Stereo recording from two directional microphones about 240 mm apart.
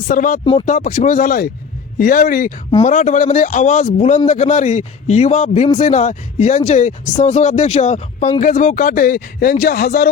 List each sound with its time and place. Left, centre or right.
0.1 s a man's voice: left